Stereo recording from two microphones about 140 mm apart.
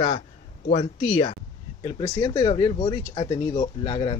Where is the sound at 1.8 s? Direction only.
35° left (ahead or behind).